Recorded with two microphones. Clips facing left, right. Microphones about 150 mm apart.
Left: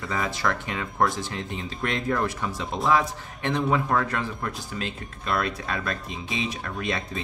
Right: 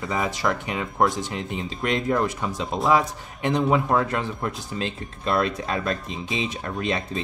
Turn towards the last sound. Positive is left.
turn(degrees=-25)  # may be behind; listen again after turning